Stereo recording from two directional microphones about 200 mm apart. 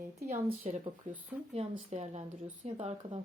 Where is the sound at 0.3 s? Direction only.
30° right (ahead or behind).